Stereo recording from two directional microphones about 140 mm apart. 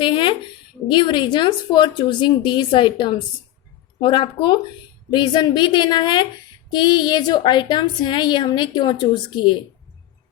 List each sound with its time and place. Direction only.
0.0 s a woman's voice: 35° left (ahead or behind)